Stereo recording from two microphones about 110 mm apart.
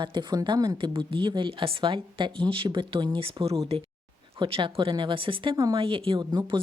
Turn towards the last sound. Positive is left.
turn(degrees=-40)  # may be behind; listen again after turning